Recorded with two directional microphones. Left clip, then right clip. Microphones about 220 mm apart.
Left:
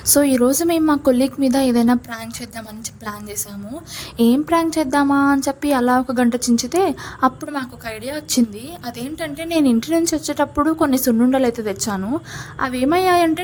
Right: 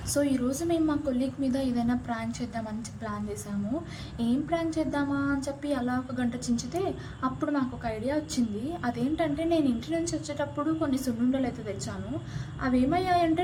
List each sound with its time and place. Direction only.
0.1 s speech: 45° left (ahead or behind)
4.2 s speech: 45° left (ahead or behind)